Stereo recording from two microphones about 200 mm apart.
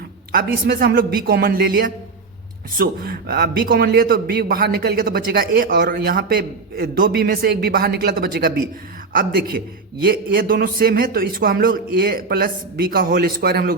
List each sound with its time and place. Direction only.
0.3 s a man's voice: 50° right (ahead or behind)